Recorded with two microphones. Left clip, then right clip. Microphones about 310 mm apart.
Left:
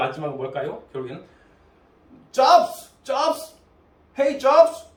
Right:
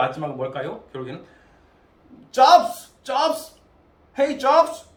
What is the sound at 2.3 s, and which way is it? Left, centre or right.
Speech, centre.